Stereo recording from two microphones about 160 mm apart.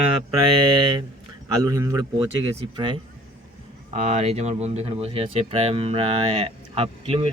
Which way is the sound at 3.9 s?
45° right (ahead or behind).